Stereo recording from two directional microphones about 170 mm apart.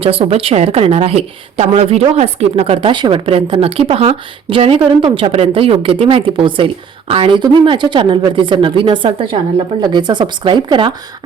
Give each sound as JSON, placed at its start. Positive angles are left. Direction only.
{"t": 0.0, "sound": "a woman's voice", "side_deg": -35}